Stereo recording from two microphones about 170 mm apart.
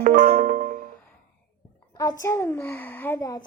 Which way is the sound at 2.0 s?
20° left (ahead or behind).